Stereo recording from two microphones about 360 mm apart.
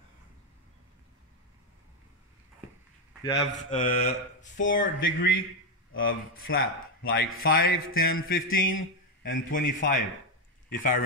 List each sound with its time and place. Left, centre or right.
3.3 s a man's voice: centre
4.6 s a man's voice: left